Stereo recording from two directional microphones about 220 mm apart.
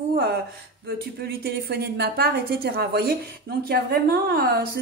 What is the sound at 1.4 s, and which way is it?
A woman's voice, 45° right (ahead or behind).